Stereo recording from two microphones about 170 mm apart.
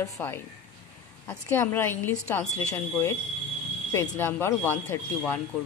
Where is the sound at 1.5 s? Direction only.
15° left (ahead or behind).